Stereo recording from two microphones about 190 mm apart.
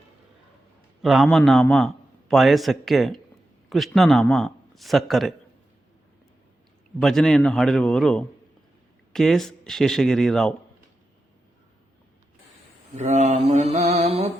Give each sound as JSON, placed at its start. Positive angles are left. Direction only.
{"t": 1.0, "sound": "a man's voice", "side_deg": 0}
{"t": 7.0, "sound": "a man's voice", "side_deg": 0}
{"t": 13.0, "sound": "mantra", "side_deg": -35}